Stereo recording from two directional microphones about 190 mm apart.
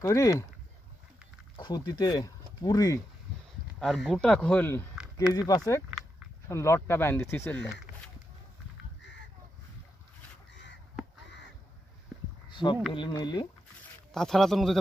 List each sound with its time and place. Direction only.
0.0 s speech: 20° left (ahead or behind)
1.5 s speech: 25° left (ahead or behind)
3.8 s speech: centre (ahead or behind)
5.1 s speech: 20° left (ahead or behind)
12.5 s a sound: 25° left (ahead or behind)
12.9 s speech: 25° left (ahead or behind)
14.1 s speech: centre (ahead or behind)